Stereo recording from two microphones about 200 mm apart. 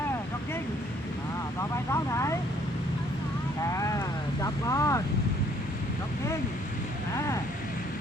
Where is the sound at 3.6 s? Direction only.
15° left (ahead or behind).